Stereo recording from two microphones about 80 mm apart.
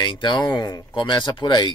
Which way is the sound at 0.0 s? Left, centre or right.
Left.